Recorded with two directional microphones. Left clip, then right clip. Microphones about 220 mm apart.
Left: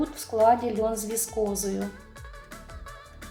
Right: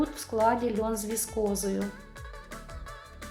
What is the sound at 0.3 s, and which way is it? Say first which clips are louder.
Speech: left 5 dB; 25° right (ahead or behind).